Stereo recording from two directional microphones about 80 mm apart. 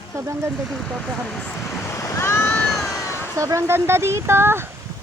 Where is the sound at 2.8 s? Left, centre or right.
Left.